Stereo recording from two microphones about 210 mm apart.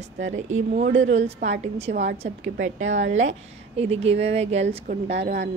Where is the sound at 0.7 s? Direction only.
35° right (ahead or behind).